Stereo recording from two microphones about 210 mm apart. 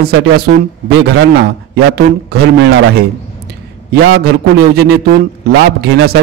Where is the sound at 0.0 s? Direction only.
50° right (ahead or behind).